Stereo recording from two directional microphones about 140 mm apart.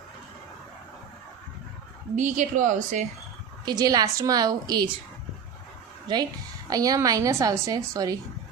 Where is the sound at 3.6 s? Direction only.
30° right (ahead or behind).